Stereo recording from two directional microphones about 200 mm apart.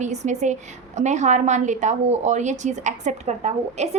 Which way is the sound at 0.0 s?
35° right (ahead or behind).